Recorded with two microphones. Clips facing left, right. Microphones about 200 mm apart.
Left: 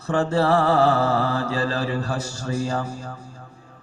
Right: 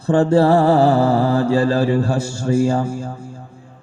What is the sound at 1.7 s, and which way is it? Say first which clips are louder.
A man's voice: right 8 dB; 30° right (ahead or behind).